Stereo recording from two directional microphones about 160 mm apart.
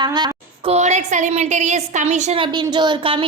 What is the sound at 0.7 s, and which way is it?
A woman's voice, 45° right (ahead or behind).